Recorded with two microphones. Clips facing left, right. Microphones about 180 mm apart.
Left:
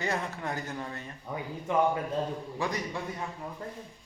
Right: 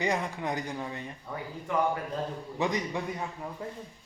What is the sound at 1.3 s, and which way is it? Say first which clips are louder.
Speech: left 2 dB; 15° left (ahead or behind).